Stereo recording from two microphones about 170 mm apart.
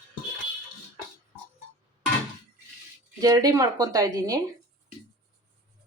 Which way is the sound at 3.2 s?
20° right (ahead or behind).